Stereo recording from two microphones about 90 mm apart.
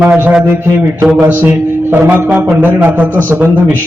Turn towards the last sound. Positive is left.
turn(degrees=-20)  # may be behind; listen again after turning